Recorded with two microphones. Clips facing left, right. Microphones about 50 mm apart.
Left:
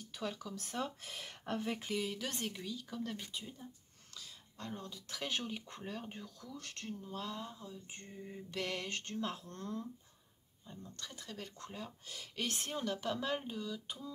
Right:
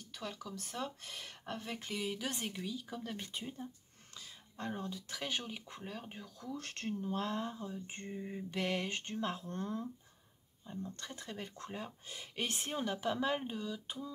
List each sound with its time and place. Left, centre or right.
0.0 s speech: centre
2.0 s speech: centre
3.2 s speech: right
4.1 s a sound: right
4.9 s speech: centre
6.5 s speech: right; by 14.1 s centre